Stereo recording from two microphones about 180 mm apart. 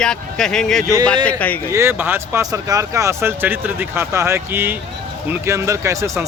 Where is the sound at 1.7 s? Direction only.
15° right (ahead or behind).